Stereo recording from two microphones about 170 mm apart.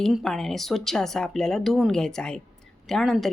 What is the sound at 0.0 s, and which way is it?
A woman's voice, centre (ahead or behind).